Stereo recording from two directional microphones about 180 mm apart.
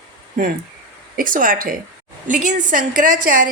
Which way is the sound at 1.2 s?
50° right (ahead or behind).